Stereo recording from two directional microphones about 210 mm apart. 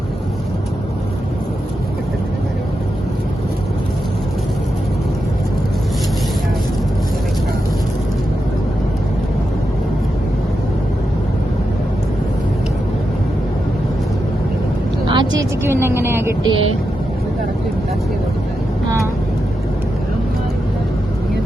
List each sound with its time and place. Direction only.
15.0 s vehicle: 20° right (ahead or behind)